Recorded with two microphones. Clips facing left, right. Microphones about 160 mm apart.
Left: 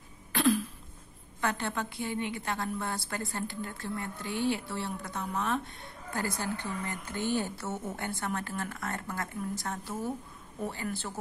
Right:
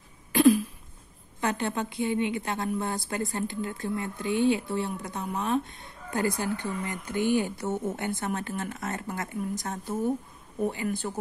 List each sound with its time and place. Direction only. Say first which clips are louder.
0.3 s throat clearing: right 7 dB; 15° right (ahead or behind)
1.4 s a woman's voice: right 4 dB; 20° right (ahead or behind)